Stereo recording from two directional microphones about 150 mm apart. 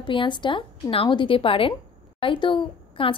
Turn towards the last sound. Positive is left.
turn(degrees=35)  # may be behind; listen again after turning